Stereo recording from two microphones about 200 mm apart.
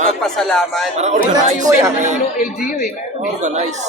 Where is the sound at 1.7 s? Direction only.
15° right (ahead or behind).